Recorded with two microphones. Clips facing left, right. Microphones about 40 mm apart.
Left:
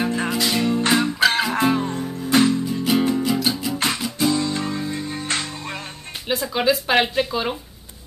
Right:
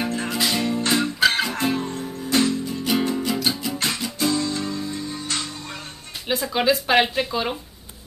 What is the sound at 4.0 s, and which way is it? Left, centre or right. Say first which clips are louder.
Guitar: left 2 dB; centre.